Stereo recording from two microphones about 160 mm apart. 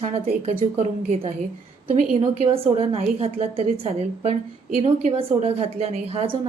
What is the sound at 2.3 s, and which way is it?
A woman's voice, 40° right (ahead or behind).